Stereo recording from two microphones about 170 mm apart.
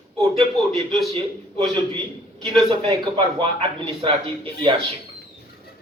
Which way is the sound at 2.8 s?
30° right (ahead or behind).